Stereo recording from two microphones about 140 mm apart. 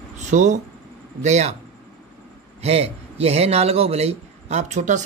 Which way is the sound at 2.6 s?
45° right (ahead or behind).